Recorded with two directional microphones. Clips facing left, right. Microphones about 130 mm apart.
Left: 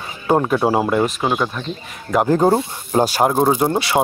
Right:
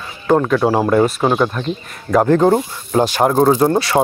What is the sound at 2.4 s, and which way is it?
Speech, 25° left (ahead or behind).